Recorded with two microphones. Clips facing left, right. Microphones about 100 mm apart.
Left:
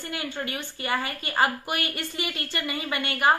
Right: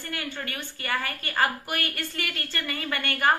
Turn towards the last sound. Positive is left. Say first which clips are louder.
# left 1 dB
turn(degrees=15)  # may be behind; listen again after turning